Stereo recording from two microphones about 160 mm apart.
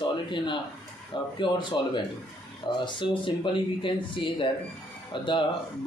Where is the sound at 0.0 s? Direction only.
30° left (ahead or behind).